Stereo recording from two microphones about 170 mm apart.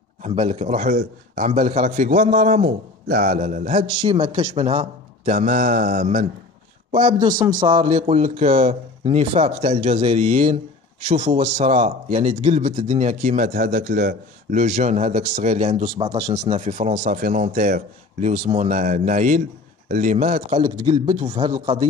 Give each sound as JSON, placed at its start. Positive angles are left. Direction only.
{"t": 0.3, "sound": "a man's voice", "side_deg": -35}
{"t": 1.5, "sound": "a man's voice", "side_deg": -40}
{"t": 3.9, "sound": "speech", "side_deg": -25}
{"t": 6.9, "sound": "a man's voice", "side_deg": -30}
{"t": 20.6, "sound": "a man's voice", "side_deg": -30}